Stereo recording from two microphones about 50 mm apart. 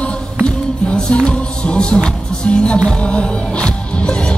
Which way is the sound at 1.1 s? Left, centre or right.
Left.